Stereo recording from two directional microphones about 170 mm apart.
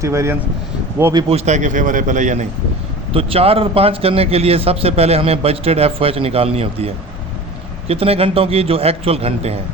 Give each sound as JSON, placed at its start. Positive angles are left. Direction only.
{"t": 0.0, "sound": "speech", "side_deg": -15}
{"t": 1.3, "sound": "speech", "side_deg": -45}
{"t": 3.1, "sound": "a man's voice", "side_deg": -35}